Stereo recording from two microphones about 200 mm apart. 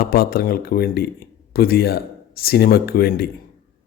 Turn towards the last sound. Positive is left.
turn(degrees=50)  # may be behind; listen again after turning